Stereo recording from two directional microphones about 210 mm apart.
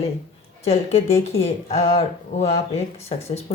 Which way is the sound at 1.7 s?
30° left (ahead or behind).